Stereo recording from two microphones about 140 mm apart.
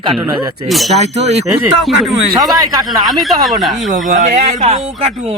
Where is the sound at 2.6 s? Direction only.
25° right (ahead or behind).